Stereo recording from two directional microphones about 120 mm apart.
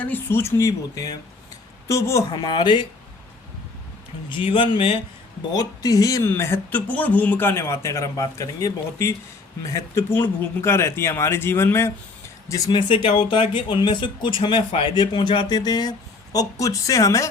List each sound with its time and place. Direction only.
0.0 s speech: 15° left (ahead or behind)
2.3 s speech: 40° left (ahead or behind)
4.3 s speech: 45° left (ahead or behind)
5.5 s speech: 30° left (ahead or behind)
12.7 s speech: 45° left (ahead or behind); by 17.2 s 25° left (ahead or behind)